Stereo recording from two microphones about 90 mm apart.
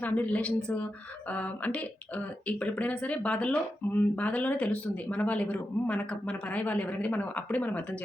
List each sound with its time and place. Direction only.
0.0 s speech: 15° left (ahead or behind)